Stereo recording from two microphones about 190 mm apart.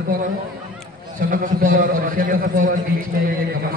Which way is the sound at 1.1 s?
45° right (ahead or behind).